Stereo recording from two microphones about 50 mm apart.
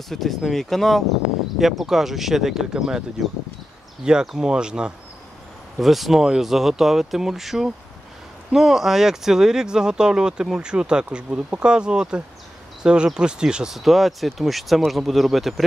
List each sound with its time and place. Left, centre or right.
0.1 s speech: centre
4.0 s speech: centre
5.8 s speech: centre
13.7 s speech: centre